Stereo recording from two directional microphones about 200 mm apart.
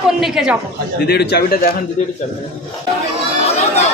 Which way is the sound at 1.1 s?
55° left (ahead or behind).